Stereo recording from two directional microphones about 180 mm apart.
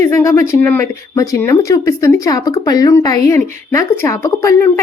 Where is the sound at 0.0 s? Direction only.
15° left (ahead or behind).